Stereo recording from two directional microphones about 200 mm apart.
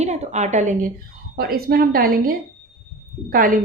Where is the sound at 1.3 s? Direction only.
50° right (ahead or behind).